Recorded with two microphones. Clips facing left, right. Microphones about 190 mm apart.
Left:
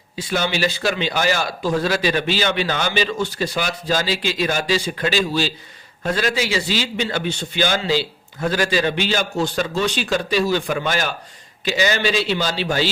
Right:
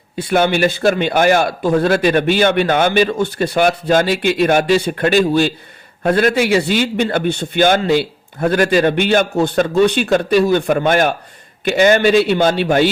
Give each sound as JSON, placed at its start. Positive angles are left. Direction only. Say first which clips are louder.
{"t": 0.2, "sound": "a man's voice", "louder": "right 7 dB", "side_deg": -55}